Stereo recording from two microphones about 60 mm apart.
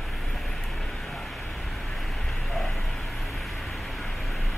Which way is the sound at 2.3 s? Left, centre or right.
Centre.